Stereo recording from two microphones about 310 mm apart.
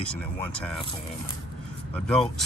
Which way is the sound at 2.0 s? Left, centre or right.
Centre.